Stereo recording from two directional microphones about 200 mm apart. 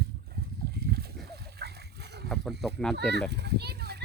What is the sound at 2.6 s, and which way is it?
Speech, centre (ahead or behind).